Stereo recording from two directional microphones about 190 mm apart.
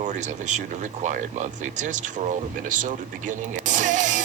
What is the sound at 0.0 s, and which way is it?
Speech, 40° right (ahead or behind).